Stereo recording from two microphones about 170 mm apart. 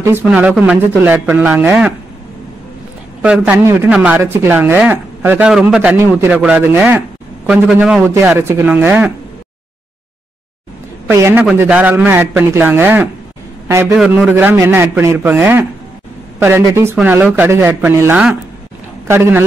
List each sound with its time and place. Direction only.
0.0 s speech: 10° right (ahead or behind)
3.2 s speech: 5° right (ahead or behind)
3.5 s a man's voice: 15° right (ahead or behind)
11.1 s a man's voice: 15° right (ahead or behind)